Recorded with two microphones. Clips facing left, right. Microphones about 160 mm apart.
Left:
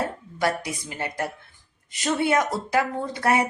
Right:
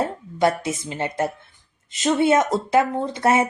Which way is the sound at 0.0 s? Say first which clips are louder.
Right 5 dB; 25° right (ahead or behind).